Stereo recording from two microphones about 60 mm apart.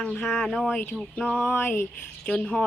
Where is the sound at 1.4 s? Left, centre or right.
Left.